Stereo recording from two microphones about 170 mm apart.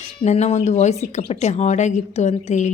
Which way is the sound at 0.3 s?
40° left (ahead or behind).